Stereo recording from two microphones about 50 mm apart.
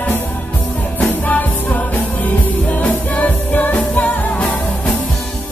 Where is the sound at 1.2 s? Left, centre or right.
Left.